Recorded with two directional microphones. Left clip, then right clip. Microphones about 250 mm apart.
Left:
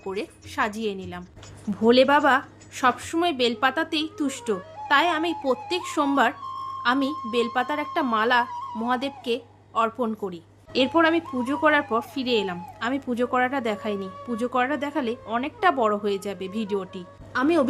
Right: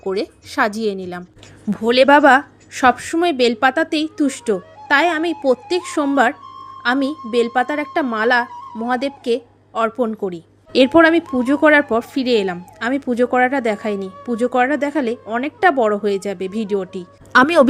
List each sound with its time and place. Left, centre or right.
0.0 s a woman's voice: centre
17.3 s speech: right